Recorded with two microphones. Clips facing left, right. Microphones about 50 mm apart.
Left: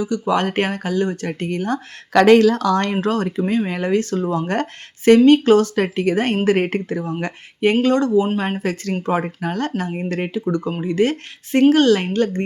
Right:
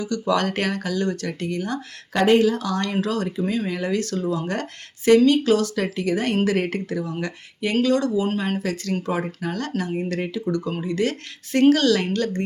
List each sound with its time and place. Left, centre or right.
0.0 s speech: left
2.1 s speech: left
2.9 s speech: left